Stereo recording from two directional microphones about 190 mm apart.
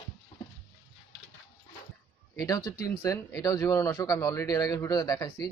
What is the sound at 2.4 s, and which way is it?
Speech, 15° left (ahead or behind).